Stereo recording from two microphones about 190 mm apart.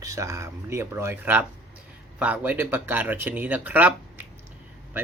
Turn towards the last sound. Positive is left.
turn(degrees=-10)  # may be behind; listen again after turning